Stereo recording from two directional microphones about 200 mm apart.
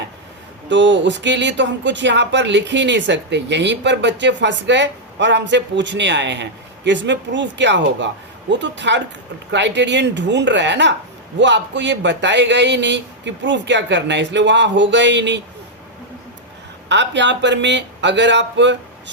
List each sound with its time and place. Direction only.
0.7 s speech: 65° right (ahead or behind)
16.9 s speech: 60° right (ahead or behind)